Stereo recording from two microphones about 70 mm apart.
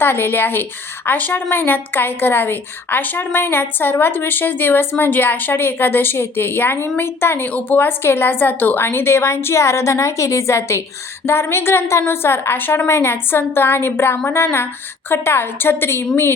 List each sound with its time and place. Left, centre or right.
0.0 s a woman's voice: left